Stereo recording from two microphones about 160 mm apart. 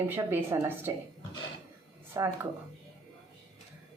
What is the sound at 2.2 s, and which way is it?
Speech, 15° right (ahead or behind).